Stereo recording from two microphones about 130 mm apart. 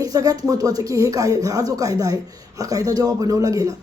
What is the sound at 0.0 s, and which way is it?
Speech, 25° right (ahead or behind).